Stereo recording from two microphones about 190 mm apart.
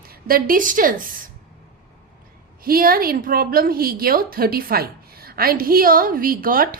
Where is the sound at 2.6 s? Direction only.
50° right (ahead or behind).